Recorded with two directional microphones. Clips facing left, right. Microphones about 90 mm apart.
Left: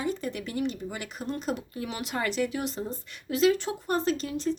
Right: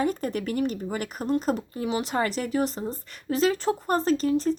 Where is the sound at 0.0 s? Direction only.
45° right (ahead or behind).